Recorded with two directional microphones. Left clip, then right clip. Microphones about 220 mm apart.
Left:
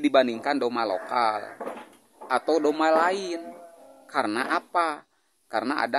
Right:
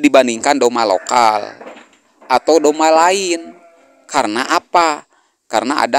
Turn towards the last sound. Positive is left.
turn(degrees=-35)  # may be behind; listen again after turning